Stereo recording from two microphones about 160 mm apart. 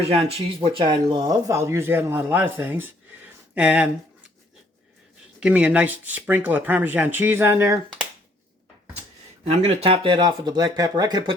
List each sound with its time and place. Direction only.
0.0 s speech: 40° right (ahead or behind); by 3.8 s 10° right (ahead or behind)
5.4 s speech: 10° right (ahead or behind)
9.5 s speech: 40° right (ahead or behind)